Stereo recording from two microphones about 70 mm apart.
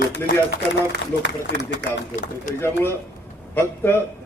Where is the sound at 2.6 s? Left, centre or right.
Left.